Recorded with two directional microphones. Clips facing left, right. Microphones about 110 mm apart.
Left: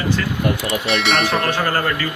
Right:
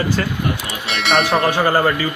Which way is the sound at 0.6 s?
Centre (ahead or behind).